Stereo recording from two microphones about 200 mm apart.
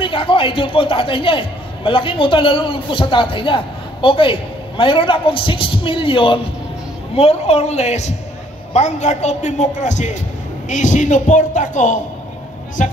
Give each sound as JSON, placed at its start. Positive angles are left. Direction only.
{"t": 0.0, "sound": "a man's voice", "side_deg": 25}